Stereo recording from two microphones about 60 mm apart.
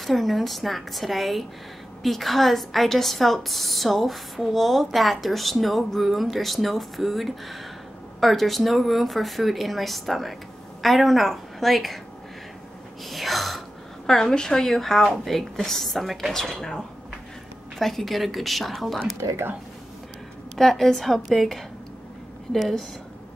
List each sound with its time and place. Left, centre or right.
0.0 s a woman's voice: centre
13.0 s gasp: centre
14.0 s a woman's voice: centre
17.7 s a woman's voice: centre
19.2 s speech: right
20.5 s a woman's voice: centre